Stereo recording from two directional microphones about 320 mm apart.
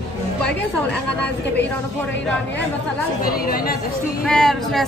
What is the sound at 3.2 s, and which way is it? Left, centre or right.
Speech, left.